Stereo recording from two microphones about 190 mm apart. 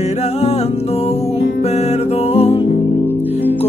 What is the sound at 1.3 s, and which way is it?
Music, 35° left (ahead or behind).